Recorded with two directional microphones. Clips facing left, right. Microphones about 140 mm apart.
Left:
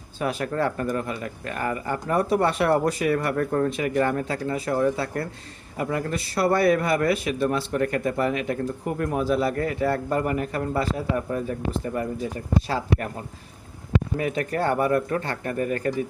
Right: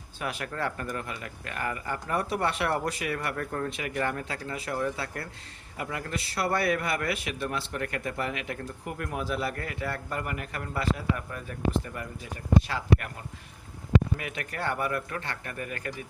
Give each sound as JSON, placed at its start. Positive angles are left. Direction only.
{"t": 0.2, "sound": "a man's voice", "side_deg": 35}
{"t": 14.2, "sound": "a man's voice", "side_deg": 35}